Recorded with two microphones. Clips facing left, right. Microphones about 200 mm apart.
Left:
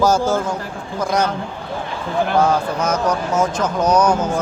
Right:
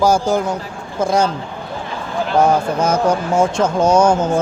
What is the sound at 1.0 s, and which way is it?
Speech, 30° right (ahead or behind).